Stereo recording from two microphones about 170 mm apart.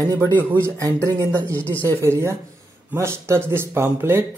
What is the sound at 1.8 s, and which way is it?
Speech, 15° right (ahead or behind).